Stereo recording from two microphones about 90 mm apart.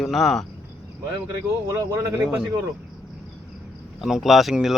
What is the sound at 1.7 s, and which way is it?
Speech, 40° right (ahead or behind).